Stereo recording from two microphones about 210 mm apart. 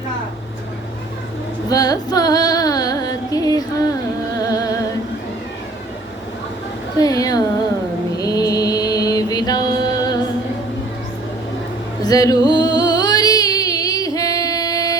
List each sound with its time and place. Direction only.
1.7 s music: 15° left (ahead or behind)
7.0 s speech: 15° left (ahead or behind)
8.2 s mantra: 15° left (ahead or behind)
12.0 s music: 15° left (ahead or behind)